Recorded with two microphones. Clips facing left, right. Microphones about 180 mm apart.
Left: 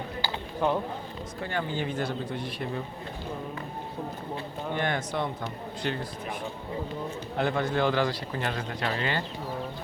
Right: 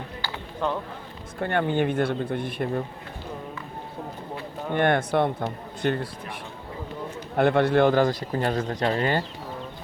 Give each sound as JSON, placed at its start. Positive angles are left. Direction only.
{"t": 0.2, "sound": "a sound", "side_deg": 10}
{"t": 1.4, "sound": "speech", "side_deg": -60}
{"t": 4.7, "sound": "speech", "side_deg": -55}
{"t": 7.3, "sound": "speech", "side_deg": -60}